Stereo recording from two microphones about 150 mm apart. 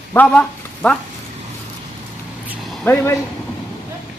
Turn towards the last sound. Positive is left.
turn(degrees=15)  # may be behind; listen again after turning